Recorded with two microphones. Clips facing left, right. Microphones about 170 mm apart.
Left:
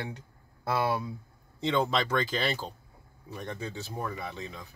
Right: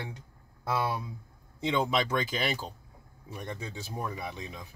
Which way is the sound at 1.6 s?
10° right (ahead or behind).